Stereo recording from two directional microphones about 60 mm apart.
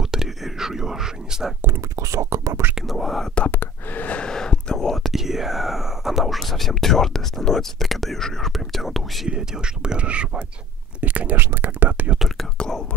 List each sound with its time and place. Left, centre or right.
0.0 s whispering: centre
2.0 s speech: right
2.7 s whispering: centre
3.5 s gasp: left
4.2 s whispering: centre
9.3 s speech: centre
11.0 s whispering: right
11.3 s whispering: right
12.5 s whispering: centre